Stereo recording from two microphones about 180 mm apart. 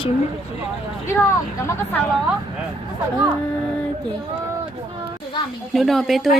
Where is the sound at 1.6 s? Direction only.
15° left (ahead or behind).